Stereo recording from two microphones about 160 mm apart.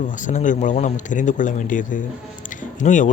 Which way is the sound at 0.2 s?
50° left (ahead or behind).